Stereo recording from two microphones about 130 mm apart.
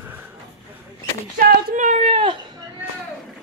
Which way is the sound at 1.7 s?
75° right (ahead or behind).